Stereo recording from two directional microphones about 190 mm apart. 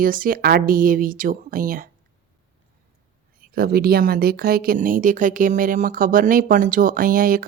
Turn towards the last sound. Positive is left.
turn(degrees=-45)  # may be behind; listen again after turning